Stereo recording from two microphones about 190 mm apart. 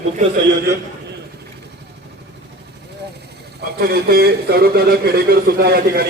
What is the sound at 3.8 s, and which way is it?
Speech, 55° right (ahead or behind).